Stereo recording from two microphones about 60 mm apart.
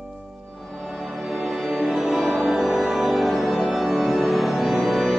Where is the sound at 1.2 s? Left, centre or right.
Centre.